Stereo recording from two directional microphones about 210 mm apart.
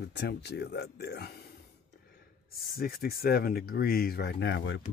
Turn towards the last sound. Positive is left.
turn(degrees=60)  # may be behind; listen again after turning